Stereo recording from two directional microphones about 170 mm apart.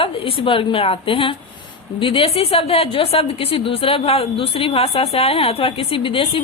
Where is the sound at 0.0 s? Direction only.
35° left (ahead or behind).